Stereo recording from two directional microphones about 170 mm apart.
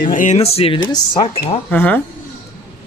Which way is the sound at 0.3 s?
35° left (ahead or behind).